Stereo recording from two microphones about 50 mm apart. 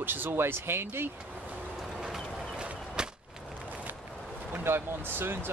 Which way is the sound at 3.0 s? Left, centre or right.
Centre.